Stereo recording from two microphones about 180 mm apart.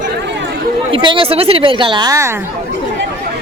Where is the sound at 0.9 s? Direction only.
30° right (ahead or behind).